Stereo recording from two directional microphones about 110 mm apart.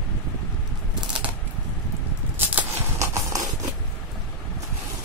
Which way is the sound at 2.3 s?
25° right (ahead or behind).